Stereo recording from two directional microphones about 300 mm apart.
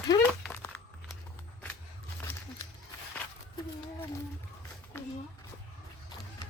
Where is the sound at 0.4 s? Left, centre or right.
Centre.